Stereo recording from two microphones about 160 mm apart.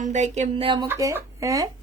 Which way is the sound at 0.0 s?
50° right (ahead or behind).